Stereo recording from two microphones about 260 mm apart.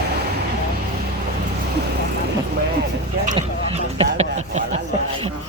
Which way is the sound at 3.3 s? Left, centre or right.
Right.